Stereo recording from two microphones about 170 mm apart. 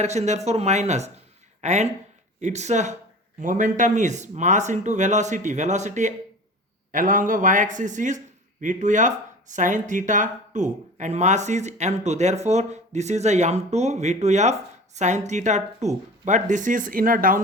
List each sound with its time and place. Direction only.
0.0 s speech: 40° right (ahead or behind)